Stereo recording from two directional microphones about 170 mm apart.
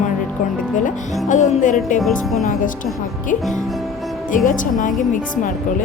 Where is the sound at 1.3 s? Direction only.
45° left (ahead or behind).